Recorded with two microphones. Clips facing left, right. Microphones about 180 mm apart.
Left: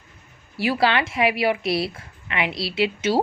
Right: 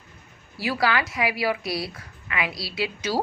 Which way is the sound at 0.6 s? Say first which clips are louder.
Left 4 dB; 25° left (ahead or behind).